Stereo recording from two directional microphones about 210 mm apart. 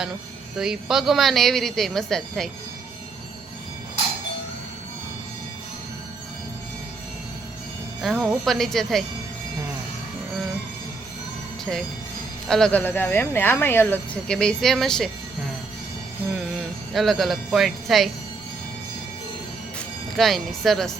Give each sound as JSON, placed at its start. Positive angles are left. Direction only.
{"t": 0.6, "sound": "a woman's voice", "side_deg": 0}
{"t": 8.0, "sound": "a woman's voice", "side_deg": 0}
{"t": 12.5, "sound": "a woman's voice", "side_deg": 5}
{"t": 16.9, "sound": "a woman's voice", "side_deg": 0}
{"t": 20.1, "sound": "a woman's voice", "side_deg": 0}